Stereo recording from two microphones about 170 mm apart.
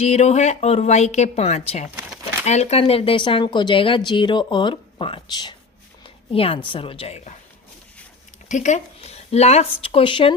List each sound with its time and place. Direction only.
0.0 s a woman's voice: 40° left (ahead or behind)
8.4 s a woman's voice: 45° left (ahead or behind); by 10.3 s 30° left (ahead or behind)